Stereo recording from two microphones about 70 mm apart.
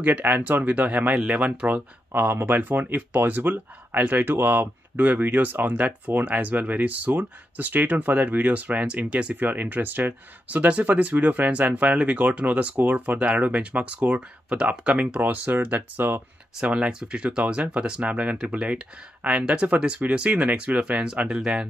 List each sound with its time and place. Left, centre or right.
0.0 s speech: right
16.5 s speech: centre